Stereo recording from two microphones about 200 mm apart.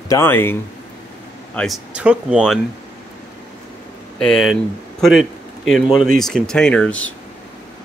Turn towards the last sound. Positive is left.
turn(degrees=5)  # may be behind; listen again after turning